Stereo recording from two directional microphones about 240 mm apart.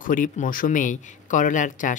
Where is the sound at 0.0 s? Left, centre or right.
Left.